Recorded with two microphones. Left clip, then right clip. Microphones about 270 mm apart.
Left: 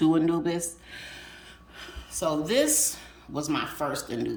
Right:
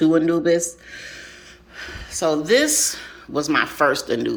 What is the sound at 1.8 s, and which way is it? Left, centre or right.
Speech, centre.